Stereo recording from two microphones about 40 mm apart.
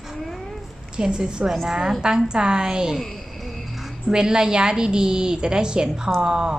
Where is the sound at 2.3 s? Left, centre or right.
Centre.